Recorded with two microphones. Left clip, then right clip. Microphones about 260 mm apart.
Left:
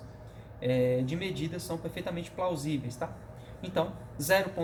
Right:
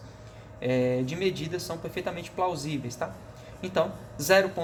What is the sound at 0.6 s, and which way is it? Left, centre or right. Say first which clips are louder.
Speech: right 2 dB; centre.